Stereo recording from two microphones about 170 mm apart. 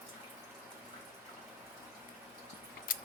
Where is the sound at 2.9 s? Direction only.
55° left (ahead or behind).